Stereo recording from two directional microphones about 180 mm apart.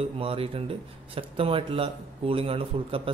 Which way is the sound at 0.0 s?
30° right (ahead or behind).